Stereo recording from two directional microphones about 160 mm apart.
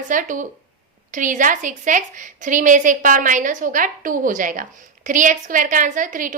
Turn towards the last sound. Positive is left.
turn(degrees=-55)  # may be behind; listen again after turning